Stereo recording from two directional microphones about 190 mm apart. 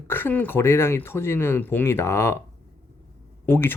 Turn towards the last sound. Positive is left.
turn(degrees=10)  # may be behind; listen again after turning